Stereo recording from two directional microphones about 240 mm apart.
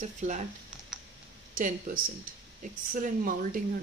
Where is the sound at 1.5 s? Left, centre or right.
Right.